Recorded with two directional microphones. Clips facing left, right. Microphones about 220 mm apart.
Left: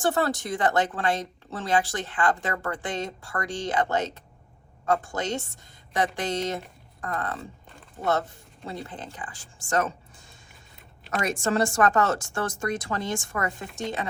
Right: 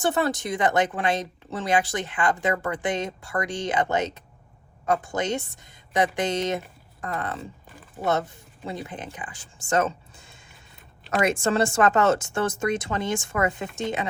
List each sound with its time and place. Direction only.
0.1 s speech: 20° right (ahead or behind)
8.6 s speech: 15° right (ahead or behind)
11.3 s speech: 25° right (ahead or behind)